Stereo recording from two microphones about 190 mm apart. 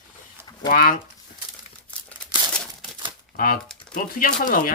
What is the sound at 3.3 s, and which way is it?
Speech, 50° left (ahead or behind).